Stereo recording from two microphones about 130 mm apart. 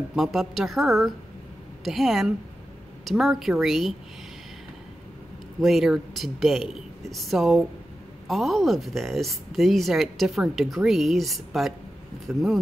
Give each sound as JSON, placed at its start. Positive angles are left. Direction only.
{"t": 0.1, "sound": "speech", "side_deg": 0}
{"t": 5.6, "sound": "speech", "side_deg": 0}